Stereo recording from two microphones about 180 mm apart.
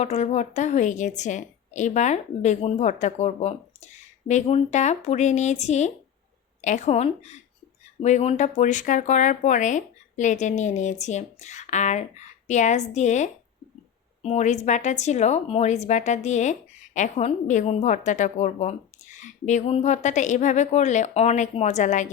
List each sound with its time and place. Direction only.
0.0 s a woman's voice: 35° left (ahead or behind)